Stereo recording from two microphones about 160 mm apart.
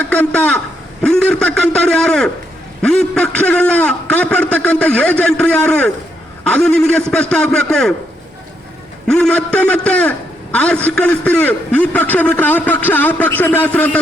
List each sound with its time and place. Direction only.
0.1 s a man's voice: 5° left (ahead or behind)
9.0 s a man's voice: 5° left (ahead or behind)